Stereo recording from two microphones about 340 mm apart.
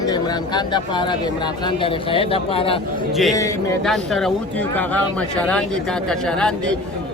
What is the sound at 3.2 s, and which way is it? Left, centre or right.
Speech, centre.